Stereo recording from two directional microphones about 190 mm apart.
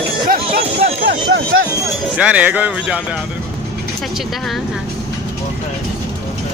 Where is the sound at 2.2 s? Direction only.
5° right (ahead or behind).